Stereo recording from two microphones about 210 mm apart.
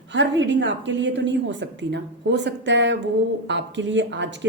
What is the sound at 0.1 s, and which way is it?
Speech, 60° right (ahead or behind).